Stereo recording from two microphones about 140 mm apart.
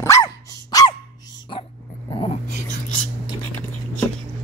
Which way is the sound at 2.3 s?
60° left (ahead or behind).